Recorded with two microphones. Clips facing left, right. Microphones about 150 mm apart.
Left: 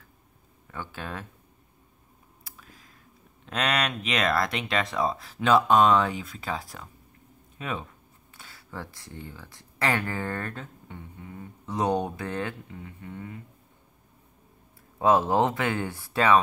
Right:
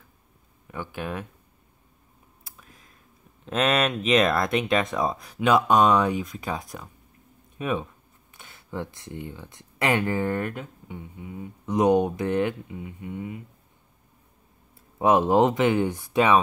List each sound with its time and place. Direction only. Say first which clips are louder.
0.7 s speech: right 4 dB; 15° right (ahead or behind)
2.4 s a sound: left 1 dB; 25° right (ahead or behind)
3.4 s speech: right 5 dB; 20° right (ahead or behind)
15.0 s speech: right 3 dB; 20° right (ahead or behind)